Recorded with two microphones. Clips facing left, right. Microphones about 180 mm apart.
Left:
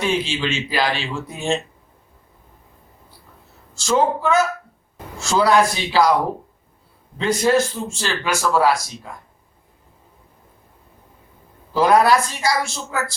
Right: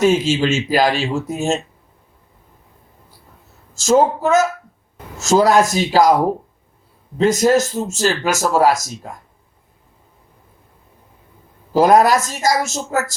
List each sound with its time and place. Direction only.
0.0 s speech: 45° right (ahead or behind)
3.8 s speech: 45° right (ahead or behind)
7.2 s speech: 45° right (ahead or behind)
11.7 s speech: 45° right (ahead or behind)